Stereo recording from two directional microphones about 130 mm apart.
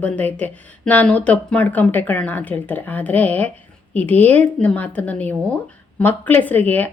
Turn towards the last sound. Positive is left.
turn(degrees=15)  # may be behind; listen again after turning